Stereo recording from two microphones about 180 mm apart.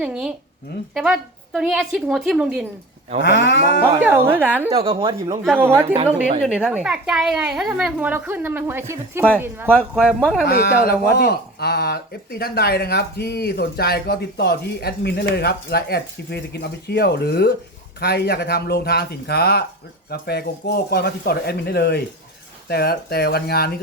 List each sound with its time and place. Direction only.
0.0 s a woman's voice: 5° right (ahead or behind)
3.2 s livestock: 90° left
4.0 s a woman's voice: 10° right (ahead or behind)
4.7 s speech: 30° right (ahead or behind)
5.5 s a woman's voice: 10° right (ahead or behind)
5.8 s a woman's voice: 35° right (ahead or behind)
6.4 s a woman's voice: 5° right (ahead or behind)
10.4 s speech: 60° left (ahead or behind)